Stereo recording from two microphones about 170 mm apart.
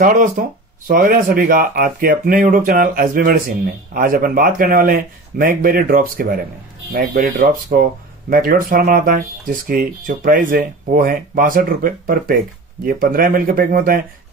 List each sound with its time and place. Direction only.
0.0 s speech: 50° right (ahead or behind)